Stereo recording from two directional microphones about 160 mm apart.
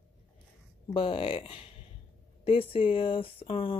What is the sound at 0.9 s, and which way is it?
Speech, 35° left (ahead or behind).